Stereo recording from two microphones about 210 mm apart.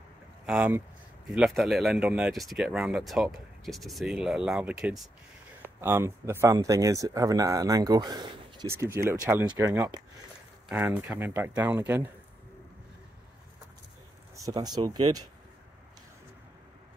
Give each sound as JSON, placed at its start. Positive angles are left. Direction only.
{"t": 0.5, "sound": "speech", "side_deg": -5}
{"t": 14.3, "sound": "speech", "side_deg": -15}